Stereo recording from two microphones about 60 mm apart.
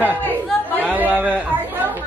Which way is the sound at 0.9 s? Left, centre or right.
Right.